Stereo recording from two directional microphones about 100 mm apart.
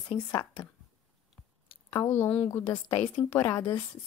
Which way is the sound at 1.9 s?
25° left (ahead or behind).